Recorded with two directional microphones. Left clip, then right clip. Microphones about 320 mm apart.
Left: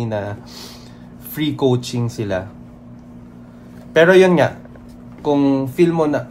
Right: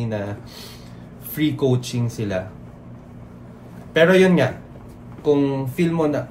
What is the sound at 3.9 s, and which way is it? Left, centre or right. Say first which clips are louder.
Speech: left 4 dB; centre.